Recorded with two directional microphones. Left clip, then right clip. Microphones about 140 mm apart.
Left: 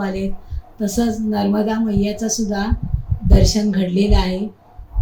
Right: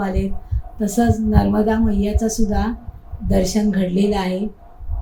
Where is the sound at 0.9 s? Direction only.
15° left (ahead or behind).